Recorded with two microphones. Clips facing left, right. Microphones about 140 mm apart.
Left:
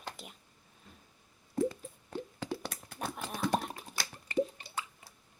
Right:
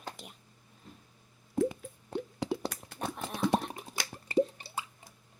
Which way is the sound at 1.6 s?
20° right (ahead or behind).